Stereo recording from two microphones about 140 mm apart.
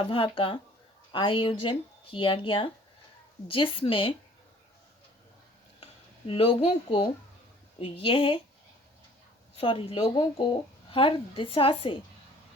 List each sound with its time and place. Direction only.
0.1 s speech: 40° left (ahead or behind)
5.8 s speech: 40° left (ahead or behind)
9.6 s speech: 40° left (ahead or behind)